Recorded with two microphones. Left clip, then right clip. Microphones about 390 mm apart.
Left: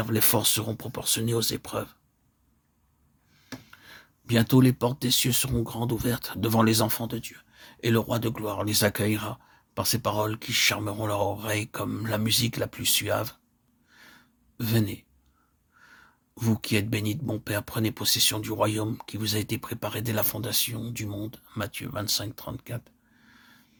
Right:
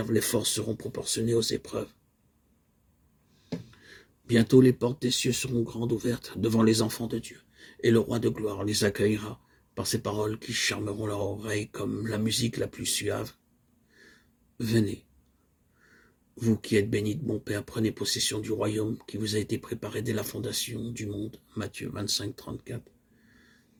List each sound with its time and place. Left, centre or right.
0.0 s speech: left
3.7 s speech: left
13.9 s a sound: left
14.6 s speech: left
16.4 s speech: left